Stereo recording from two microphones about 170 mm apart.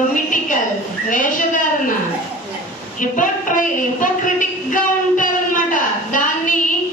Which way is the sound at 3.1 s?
50° left (ahead or behind).